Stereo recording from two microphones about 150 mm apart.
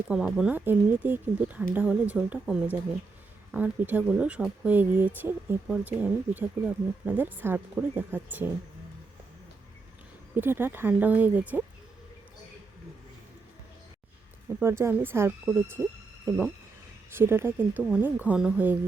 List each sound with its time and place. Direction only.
0.1 s speech: 5° right (ahead or behind)
10.3 s speech: 15° right (ahead or behind)
14.6 s speech: 15° right (ahead or behind)